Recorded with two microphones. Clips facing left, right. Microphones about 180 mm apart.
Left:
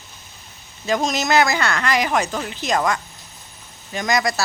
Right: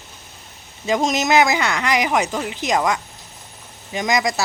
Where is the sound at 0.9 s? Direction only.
20° right (ahead or behind).